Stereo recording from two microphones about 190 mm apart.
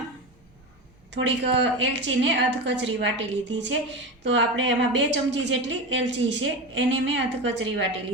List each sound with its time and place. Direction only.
1.1 s a woman's voice: 70° right (ahead or behind)